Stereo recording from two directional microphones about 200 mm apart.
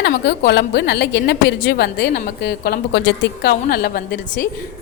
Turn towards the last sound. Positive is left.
turn(degrees=50)  # may be behind; listen again after turning